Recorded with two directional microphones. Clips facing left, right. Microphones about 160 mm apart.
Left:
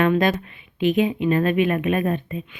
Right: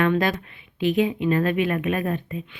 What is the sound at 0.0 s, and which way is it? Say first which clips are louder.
Speech: left 2 dB; 20° left (ahead or behind).